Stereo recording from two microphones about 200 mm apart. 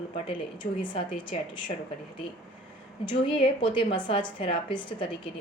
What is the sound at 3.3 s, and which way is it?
A woman's voice, 25° left (ahead or behind).